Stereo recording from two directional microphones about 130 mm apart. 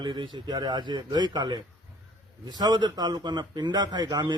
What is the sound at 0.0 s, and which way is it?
A man's voice, 35° right (ahead or behind).